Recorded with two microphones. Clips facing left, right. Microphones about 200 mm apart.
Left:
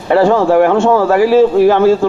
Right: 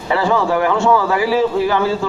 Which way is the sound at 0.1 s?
50° left (ahead or behind).